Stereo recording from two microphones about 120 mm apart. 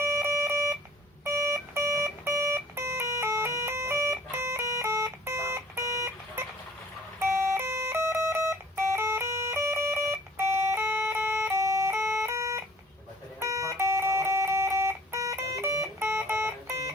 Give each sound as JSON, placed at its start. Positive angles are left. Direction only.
{"t": 0.0, "sound": "a sound", "side_deg": -25}
{"t": 1.2, "sound": "alarm clock", "side_deg": -25}
{"t": 7.2, "sound": "music", "side_deg": -25}